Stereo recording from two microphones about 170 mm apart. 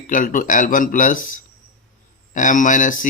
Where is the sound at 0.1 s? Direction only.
50° left (ahead or behind).